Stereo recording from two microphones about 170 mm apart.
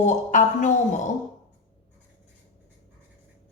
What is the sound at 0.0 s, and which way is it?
Speech, 45° left (ahead or behind).